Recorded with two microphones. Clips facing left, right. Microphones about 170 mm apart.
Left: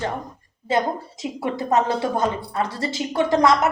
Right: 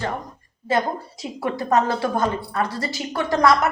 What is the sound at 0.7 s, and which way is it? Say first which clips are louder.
A woman's voice: even; 20° left (ahead or behind).